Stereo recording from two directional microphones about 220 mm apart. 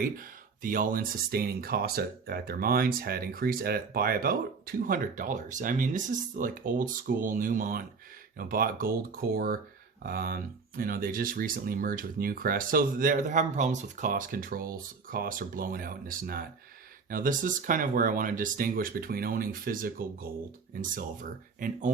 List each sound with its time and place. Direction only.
0.0 s speech: 40° right (ahead or behind)